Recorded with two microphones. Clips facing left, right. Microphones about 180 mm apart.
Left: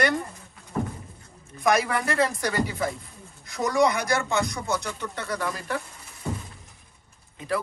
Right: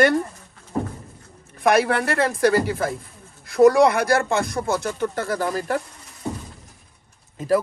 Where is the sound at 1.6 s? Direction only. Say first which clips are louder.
Right 5 dB; 65° right (ahead or behind).